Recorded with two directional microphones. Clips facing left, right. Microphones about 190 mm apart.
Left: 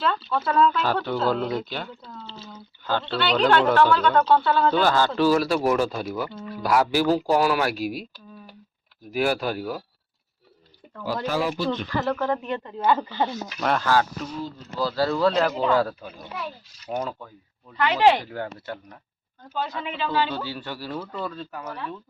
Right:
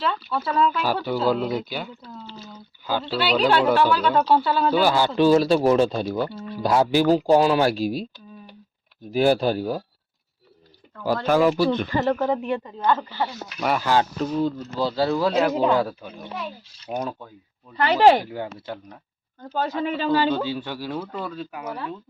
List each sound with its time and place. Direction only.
0.3 s speech: 5° right (ahead or behind); by 8.0 s 30° right (ahead or behind)
9.1 s speech: 30° right (ahead or behind)
11.0 s speech: 50° right (ahead or behind)
11.9 s speech: 15° right (ahead or behind)
12.6 s speech: 5° left (ahead or behind)
13.6 s speech: 5° right (ahead or behind)
14.8 s speech: 25° right (ahead or behind)
17.7 s speech: 40° right (ahead or behind)
18.2 s speech: 10° right (ahead or behind)
19.5 s speech: 45° right (ahead or behind)
20.4 s speech: 15° right (ahead or behind)